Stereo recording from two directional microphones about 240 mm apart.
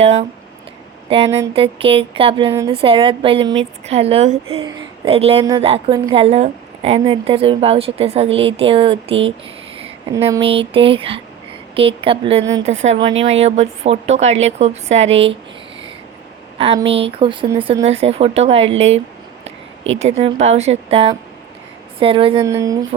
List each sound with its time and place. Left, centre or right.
0.0 s a woman's voice: right
9.8 s a sound: right
10.3 s a woman's voice: right
16.6 s a woman's voice: right
19.5 s a sound: right
20.0 s a woman's voice: right